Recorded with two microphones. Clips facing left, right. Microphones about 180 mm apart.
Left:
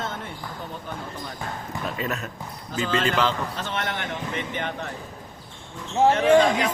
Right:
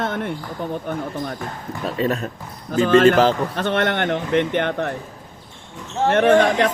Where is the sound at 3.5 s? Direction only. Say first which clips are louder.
Right 9 dB; 60° right (ahead or behind).